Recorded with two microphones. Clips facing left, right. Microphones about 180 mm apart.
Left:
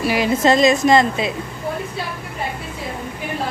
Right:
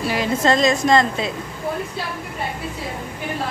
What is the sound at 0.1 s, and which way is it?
Speech, 10° left (ahead or behind).